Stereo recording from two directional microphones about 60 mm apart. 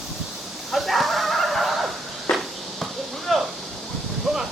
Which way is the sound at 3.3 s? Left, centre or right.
Centre.